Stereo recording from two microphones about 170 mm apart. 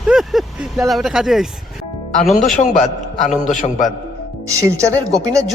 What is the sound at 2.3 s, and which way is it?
A man's voice, 45° left (ahead or behind).